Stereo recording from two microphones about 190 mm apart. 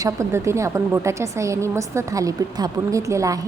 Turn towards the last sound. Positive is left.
turn(degrees=-15)  # may be behind; listen again after turning